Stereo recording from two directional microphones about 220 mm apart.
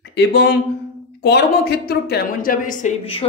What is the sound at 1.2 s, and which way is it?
A woman's voice, 45° left (ahead or behind).